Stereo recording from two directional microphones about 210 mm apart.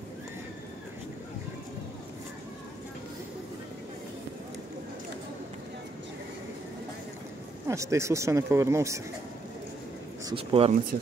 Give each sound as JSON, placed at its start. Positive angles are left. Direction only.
{"t": 7.6, "sound": "speech", "side_deg": -15}
{"t": 10.3, "sound": "speech", "side_deg": -25}